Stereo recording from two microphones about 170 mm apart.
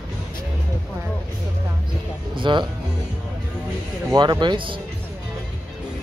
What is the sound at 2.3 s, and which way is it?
Speech, 30° right (ahead or behind).